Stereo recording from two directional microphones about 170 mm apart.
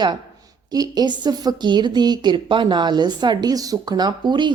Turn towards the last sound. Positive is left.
turn(degrees=-25)  # may be behind; listen again after turning